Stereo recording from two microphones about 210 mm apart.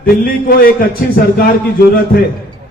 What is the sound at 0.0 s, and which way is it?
A man's voice, 45° left (ahead or behind).